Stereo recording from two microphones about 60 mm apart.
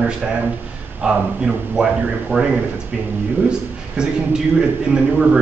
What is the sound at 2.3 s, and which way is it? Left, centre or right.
Speech, right.